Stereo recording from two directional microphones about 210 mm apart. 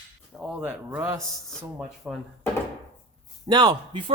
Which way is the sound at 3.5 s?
20° right (ahead or behind).